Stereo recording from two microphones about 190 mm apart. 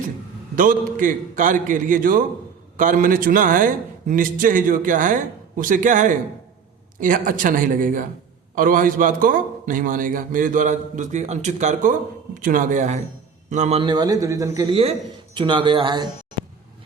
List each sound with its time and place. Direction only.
0.5 s a man's voice: 45° right (ahead or behind); by 16.0 s 25° right (ahead or behind)